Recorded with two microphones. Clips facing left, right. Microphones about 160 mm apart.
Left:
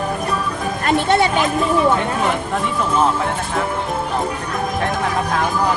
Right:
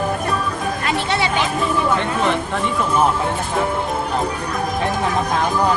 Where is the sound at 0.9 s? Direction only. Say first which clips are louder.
Left 7 dB; 50° left (ahead or behind).